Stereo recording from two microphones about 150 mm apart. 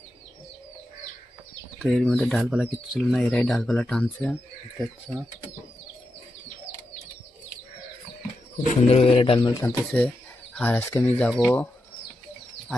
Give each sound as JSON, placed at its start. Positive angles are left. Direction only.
{"t": 1.8, "sound": "speech", "side_deg": 0}
{"t": 8.9, "sound": "speech", "side_deg": 40}
{"t": 9.6, "sound": "speech", "side_deg": 10}